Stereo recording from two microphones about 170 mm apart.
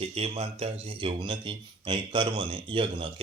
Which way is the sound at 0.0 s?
35° right (ahead or behind).